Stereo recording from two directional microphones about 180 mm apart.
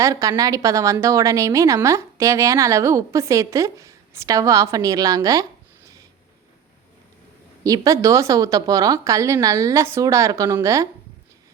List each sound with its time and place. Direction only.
0.0 s a woman's voice: 20° right (ahead or behind)
7.6 s a woman's voice: 20° right (ahead or behind)